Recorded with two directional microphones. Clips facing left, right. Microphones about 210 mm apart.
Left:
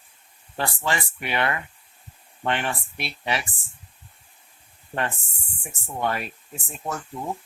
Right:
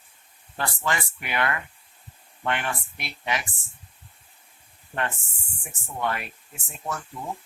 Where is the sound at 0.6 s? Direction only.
30° left (ahead or behind).